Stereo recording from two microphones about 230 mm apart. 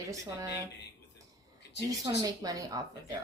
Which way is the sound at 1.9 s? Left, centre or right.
Centre.